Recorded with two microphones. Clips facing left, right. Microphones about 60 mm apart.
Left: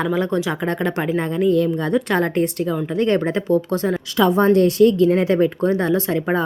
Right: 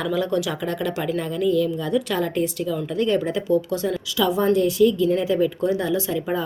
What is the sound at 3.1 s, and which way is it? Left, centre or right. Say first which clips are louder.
A woman's voice: left 2 dB; left.